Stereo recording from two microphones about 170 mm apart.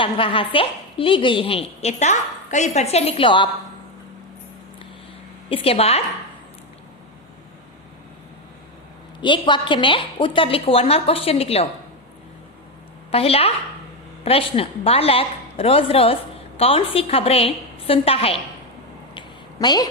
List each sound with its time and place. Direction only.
0.0 s a woman's voice: 30° left (ahead or behind)
5.5 s a woman's voice: 35° left (ahead or behind)
9.2 s a woman's voice: 30° left (ahead or behind)
13.1 s a woman's voice: 35° left (ahead or behind)
19.1 s a sound: 25° left (ahead or behind)